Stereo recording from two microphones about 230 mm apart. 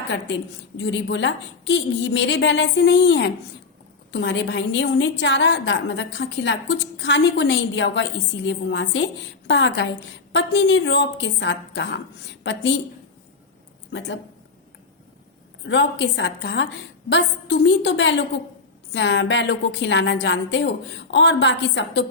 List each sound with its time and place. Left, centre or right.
0.8 s a woman's voice: left
15.6 s a woman's voice: left